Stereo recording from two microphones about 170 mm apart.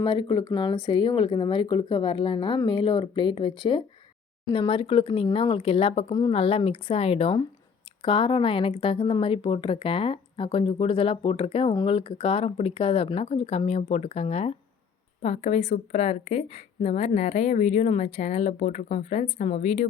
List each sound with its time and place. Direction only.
0.0 s a woman's voice: 30° left (ahead or behind)